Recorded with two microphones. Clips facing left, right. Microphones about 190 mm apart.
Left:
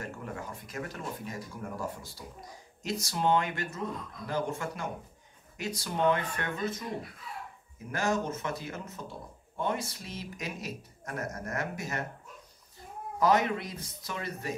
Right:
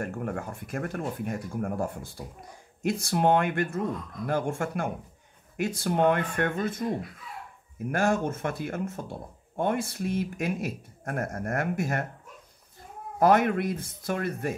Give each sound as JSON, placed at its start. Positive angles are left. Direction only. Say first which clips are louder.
{"t": 0.0, "sound": "speech", "louder": "right 7 dB", "side_deg": -55}
{"t": 7.9, "sound": "speech", "louder": "right 4 dB", "side_deg": -55}
{"t": 13.2, "sound": "speech", "louder": "right 5 dB", "side_deg": -55}